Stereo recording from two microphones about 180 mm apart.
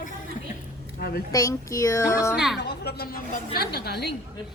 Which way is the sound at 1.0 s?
60° left (ahead or behind).